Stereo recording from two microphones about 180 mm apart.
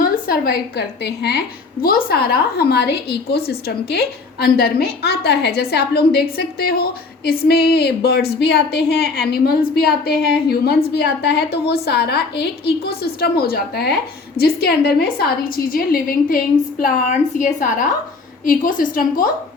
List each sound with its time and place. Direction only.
0.0 s a woman's voice: 55° left (ahead or behind)
1.8 s a woman's voice: 55° left (ahead or behind)